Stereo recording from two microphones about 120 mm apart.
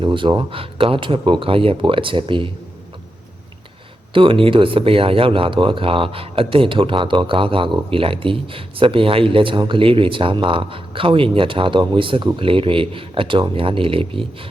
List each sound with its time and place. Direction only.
0.0 s speech: 45° right (ahead or behind)
4.1 s speech: 45° right (ahead or behind)